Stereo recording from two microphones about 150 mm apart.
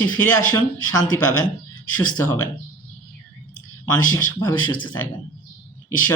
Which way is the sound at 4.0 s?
25° left (ahead or behind).